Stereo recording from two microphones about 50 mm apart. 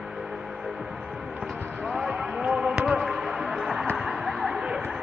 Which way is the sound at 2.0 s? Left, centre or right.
Centre.